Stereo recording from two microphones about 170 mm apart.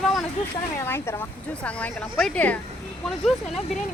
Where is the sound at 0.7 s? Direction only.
15° left (ahead or behind).